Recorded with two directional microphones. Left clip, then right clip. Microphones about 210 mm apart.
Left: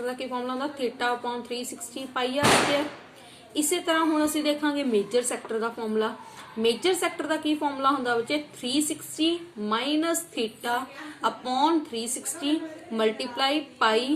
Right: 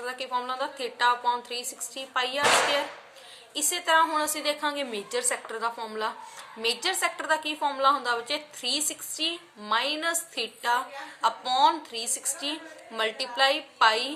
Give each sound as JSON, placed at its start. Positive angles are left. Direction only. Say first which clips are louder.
{"t": 0.0, "sound": "a woman's voice", "louder": "even", "side_deg": -35}
{"t": 3.5, "sound": "a woman's voice", "louder": "right 1 dB", "side_deg": -35}